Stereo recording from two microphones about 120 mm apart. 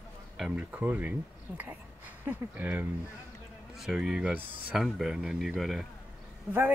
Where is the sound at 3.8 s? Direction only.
5° right (ahead or behind).